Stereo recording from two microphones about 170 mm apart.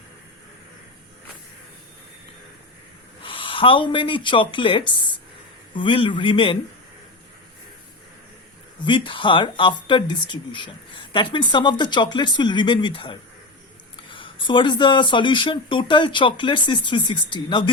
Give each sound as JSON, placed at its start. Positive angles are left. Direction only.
{"t": 3.2, "sound": "speech", "side_deg": 30}
{"t": 8.8, "sound": "speech", "side_deg": 30}